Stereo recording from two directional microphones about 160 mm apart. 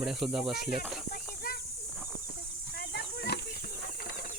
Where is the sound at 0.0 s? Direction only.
5° right (ahead or behind).